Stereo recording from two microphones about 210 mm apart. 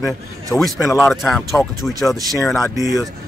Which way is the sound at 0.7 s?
Centre (ahead or behind).